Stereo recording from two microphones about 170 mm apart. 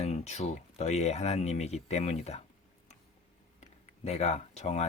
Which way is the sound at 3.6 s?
40° left (ahead or behind).